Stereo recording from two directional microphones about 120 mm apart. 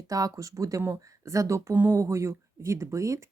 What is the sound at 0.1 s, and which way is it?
Speech, 30° right (ahead or behind).